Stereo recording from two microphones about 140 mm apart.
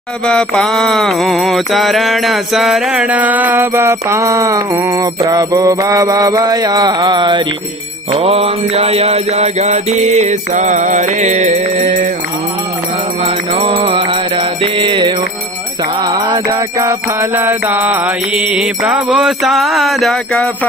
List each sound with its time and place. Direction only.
0.3 s mantra: 5° left (ahead or behind); by 7.4 s 30° right (ahead or behind)
8.1 s mantra: 45° right (ahead or behind); by 12.1 s 70° right (ahead or behind)
13.2 s mantra: 40° right (ahead or behind); by 20.4 s centre (ahead or behind)